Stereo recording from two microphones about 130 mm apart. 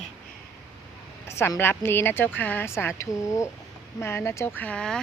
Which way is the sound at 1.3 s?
20° left (ahead or behind).